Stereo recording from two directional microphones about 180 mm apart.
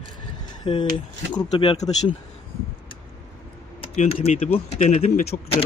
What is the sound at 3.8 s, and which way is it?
Speech, 35° left (ahead or behind).